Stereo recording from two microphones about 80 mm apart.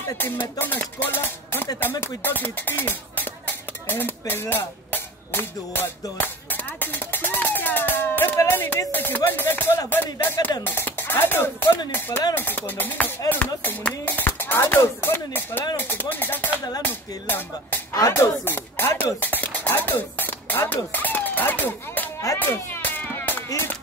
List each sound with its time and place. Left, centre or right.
0.2 s speech: left
6.1 s music: left
8.5 s speech: left
17.9 s speech: left
22.4 s music: left